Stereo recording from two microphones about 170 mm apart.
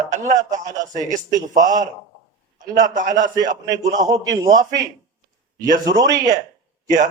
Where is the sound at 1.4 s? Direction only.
20° right (ahead or behind).